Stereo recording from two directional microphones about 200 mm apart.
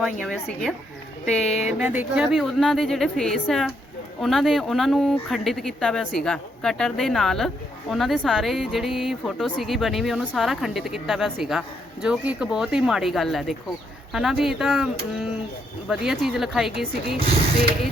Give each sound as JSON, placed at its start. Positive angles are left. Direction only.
{"t": 1.2, "sound": "speech", "side_deg": 5}
{"t": 1.5, "sound": "speech", "side_deg": 35}
{"t": 1.8, "sound": "speech", "side_deg": -5}